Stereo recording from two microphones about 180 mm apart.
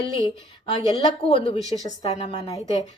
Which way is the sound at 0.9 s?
30° left (ahead or behind).